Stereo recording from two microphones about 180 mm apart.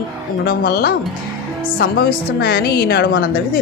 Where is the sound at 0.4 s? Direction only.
55° left (ahead or behind).